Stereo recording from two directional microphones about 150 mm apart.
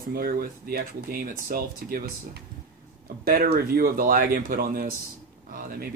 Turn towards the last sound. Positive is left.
turn(degrees=-75)  # may be behind; listen again after turning